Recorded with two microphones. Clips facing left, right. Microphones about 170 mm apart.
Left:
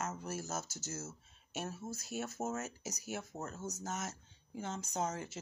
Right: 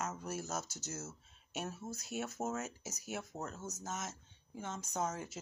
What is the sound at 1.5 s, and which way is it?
Speech, 45° left (ahead or behind).